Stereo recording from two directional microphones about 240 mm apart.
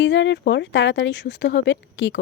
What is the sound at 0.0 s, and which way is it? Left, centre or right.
A woman's voice, left.